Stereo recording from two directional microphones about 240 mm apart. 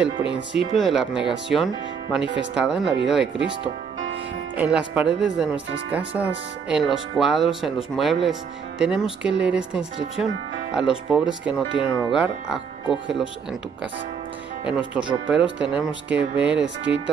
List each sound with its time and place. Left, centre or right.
0.0 s speech: centre
4.6 s speech: centre
14.6 s speech: centre
16.5 s speech: right